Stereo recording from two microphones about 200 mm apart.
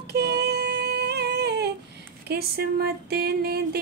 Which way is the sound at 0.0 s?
55° right (ahead or behind).